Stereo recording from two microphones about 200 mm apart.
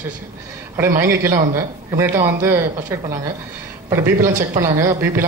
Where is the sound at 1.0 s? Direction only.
15° right (ahead or behind).